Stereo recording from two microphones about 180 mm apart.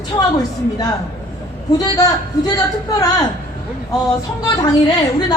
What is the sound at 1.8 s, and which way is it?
Speech, 20° left (ahead or behind).